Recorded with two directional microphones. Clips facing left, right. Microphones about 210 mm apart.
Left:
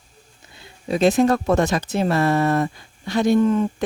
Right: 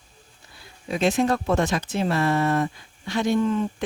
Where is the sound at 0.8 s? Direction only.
35° left (ahead or behind).